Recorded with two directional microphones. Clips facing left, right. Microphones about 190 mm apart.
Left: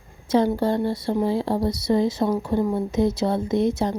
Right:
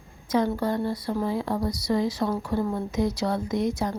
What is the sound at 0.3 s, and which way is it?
Speech, 30° left (ahead or behind).